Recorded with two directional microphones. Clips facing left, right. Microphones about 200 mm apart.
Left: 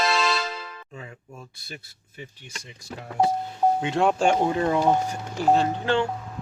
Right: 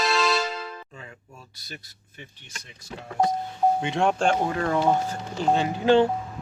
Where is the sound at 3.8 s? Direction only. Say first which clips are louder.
Left 2 dB; centre (ahead or behind).